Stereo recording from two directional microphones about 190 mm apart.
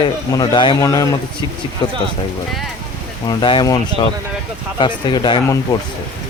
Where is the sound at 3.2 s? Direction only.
25° left (ahead or behind).